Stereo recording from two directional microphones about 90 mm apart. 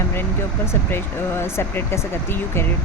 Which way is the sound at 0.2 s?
25° left (ahead or behind).